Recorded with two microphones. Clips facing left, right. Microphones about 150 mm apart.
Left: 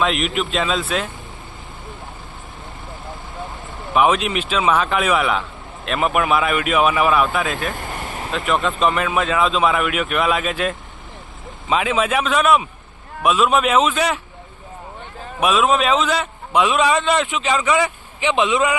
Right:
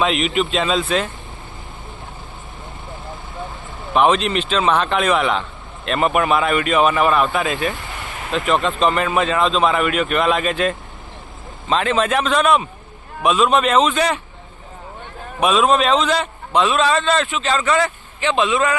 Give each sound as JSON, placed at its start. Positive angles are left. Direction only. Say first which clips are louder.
{"t": 0.0, "sound": "a man's voice", "louder": "right 2 dB", "side_deg": 0}
{"t": 3.9, "sound": "a man's voice", "louder": "right 1 dB", "side_deg": 5}
{"t": 7.8, "sound": "vehicle", "louder": "left 3 dB", "side_deg": 45}
{"t": 8.3, "sound": "a man's voice", "louder": "right 2 dB", "side_deg": 0}
{"t": 15.4, "sound": "a man's voice", "louder": "right 1 dB", "side_deg": 5}